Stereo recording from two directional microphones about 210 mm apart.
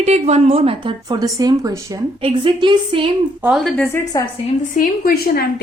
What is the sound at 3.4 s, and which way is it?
Speech, centre (ahead or behind).